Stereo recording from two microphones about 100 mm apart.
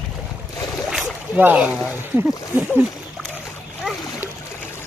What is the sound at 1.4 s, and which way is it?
Speech, 15° right (ahead or behind).